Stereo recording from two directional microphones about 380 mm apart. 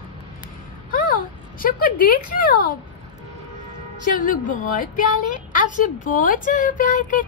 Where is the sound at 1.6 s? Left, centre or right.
Left.